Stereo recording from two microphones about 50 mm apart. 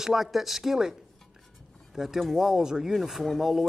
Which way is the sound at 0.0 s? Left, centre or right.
Centre.